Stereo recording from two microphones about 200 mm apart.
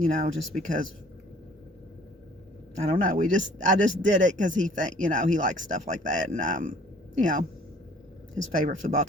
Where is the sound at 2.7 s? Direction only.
35° right (ahead or behind).